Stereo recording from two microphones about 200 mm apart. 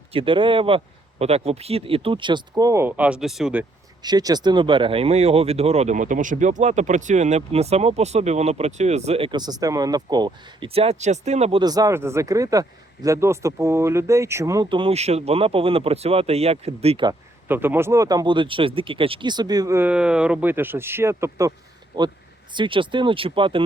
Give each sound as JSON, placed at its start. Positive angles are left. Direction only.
{"t": 0.1, "sound": "speech", "side_deg": -25}
{"t": 4.0, "sound": "speech", "side_deg": -20}
{"t": 11.6, "sound": "speech", "side_deg": -20}
{"t": 17.1, "sound": "speech", "side_deg": -10}